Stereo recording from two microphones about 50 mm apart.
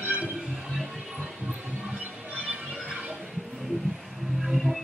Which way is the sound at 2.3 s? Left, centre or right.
Right.